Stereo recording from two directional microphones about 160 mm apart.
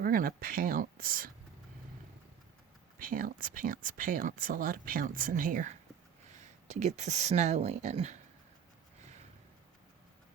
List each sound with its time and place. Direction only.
0.0 s speech: 65° right (ahead or behind)
3.0 s speech: 60° right (ahead or behind)
6.4 s speech: 45° right (ahead or behind)